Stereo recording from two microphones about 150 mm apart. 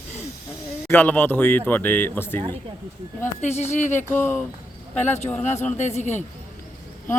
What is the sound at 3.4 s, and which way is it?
Speech, 50° left (ahead or behind).